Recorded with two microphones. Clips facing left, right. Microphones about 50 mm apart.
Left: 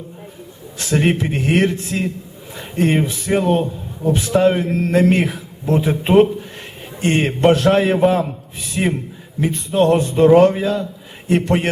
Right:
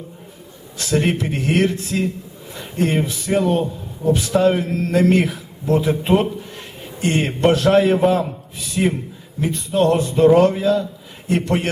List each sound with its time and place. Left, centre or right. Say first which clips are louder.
0.8 s a man's voice: left 2 dB; left
9.4 s a man's voice: left 2 dB; left